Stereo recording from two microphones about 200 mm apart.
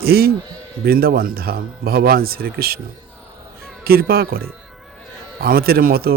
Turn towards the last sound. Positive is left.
turn(degrees=-50)  # may be behind; listen again after turning